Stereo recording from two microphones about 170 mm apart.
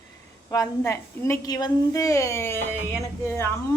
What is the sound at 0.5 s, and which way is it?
A woman's voice, 20° left (ahead or behind).